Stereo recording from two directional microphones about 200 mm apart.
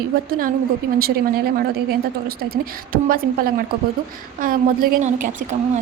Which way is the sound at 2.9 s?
45° right (ahead or behind).